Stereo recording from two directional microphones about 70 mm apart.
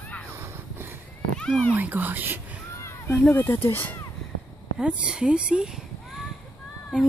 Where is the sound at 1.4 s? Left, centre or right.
Centre.